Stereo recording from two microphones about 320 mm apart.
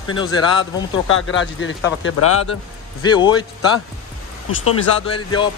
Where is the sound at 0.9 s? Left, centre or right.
Left.